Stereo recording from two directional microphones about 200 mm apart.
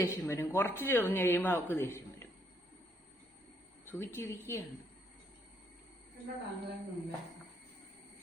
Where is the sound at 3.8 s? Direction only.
10° left (ahead or behind).